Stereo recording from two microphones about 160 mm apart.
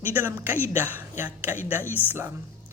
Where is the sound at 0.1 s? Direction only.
15° right (ahead or behind).